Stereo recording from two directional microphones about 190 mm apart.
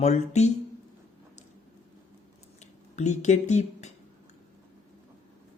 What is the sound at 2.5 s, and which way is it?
Speech, 40° left (ahead or behind).